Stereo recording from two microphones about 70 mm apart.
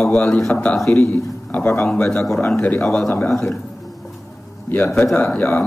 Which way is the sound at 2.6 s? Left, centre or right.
Centre.